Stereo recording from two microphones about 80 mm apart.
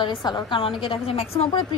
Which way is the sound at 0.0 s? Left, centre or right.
Left.